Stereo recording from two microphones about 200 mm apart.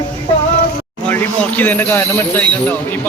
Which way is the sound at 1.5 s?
10° left (ahead or behind).